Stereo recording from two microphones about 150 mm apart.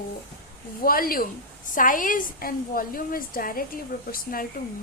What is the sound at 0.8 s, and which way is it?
A woman's voice, 75° left (ahead or behind).